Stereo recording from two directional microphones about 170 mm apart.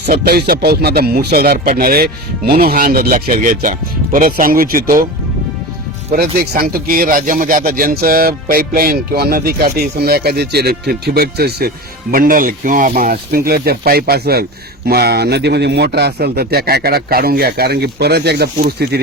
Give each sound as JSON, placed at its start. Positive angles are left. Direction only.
{"t": 0.0, "sound": "a man's voice", "side_deg": -65}
{"t": 6.1, "sound": "a man's voice", "side_deg": -70}
{"t": 12.1, "sound": "a man's voice", "side_deg": -55}